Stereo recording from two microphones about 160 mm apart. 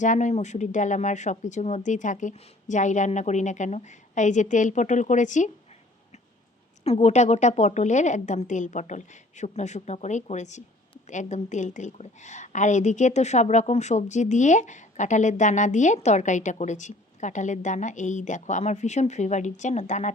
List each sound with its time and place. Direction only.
0.0 s a woman's voice: 50° left (ahead or behind)
6.8 s a woman's voice: 40° left (ahead or behind)